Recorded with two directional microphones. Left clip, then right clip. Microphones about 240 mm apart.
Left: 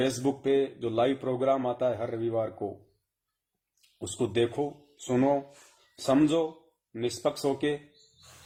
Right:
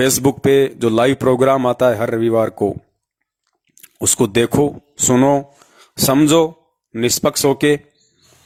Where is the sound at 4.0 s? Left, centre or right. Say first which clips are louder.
Right 12 dB; right.